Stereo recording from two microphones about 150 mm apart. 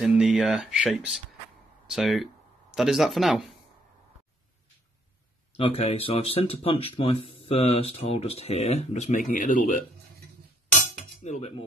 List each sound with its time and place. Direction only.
0.0 s speech: 5° right (ahead or behind)
5.5 s speech: 40° left (ahead or behind); by 9.8 s 65° left (ahead or behind)
11.2 s cutlery: 50° left (ahead or behind)